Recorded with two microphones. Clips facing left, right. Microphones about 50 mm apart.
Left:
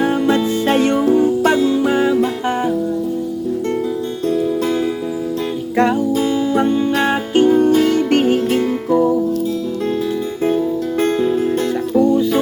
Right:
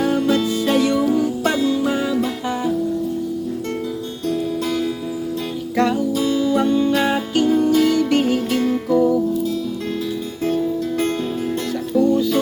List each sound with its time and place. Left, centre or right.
0.0 s music: left
5.7 s music: left
8.6 s music: left
11.9 s music: left